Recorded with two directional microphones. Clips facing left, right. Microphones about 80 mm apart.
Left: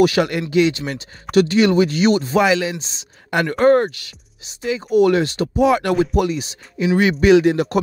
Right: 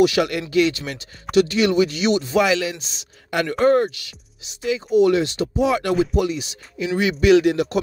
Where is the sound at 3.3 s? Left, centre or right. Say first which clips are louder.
Left 3 dB; left.